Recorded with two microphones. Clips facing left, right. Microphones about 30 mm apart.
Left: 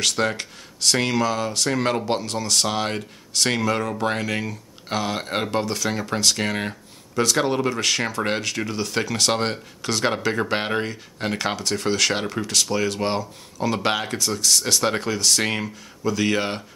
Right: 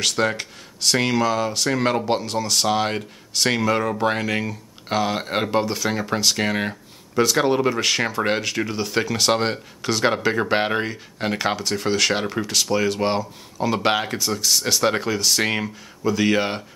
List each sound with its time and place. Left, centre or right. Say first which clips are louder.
0.0 s speech: right 1 dB; centre